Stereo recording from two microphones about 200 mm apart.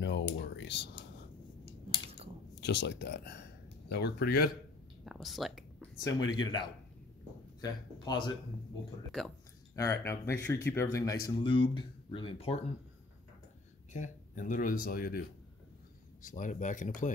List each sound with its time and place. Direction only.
0.0 s a sound: 60° left (ahead or behind)
2.6 s speech: 60° left (ahead or behind)
5.0 s a sound: centre (ahead or behind)
6.0 s speech: 20° left (ahead or behind)
9.8 s speech: 15° left (ahead or behind)
11.2 s speech: 25° left (ahead or behind)
13.9 s speech: 40° left (ahead or behind)